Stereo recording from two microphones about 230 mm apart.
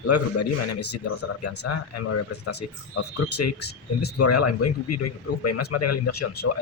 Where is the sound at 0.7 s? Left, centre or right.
Left.